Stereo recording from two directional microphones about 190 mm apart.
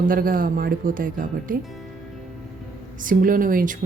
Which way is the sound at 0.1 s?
45° right (ahead or behind).